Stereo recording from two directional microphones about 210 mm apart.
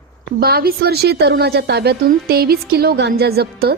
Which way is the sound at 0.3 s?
45° right (ahead or behind).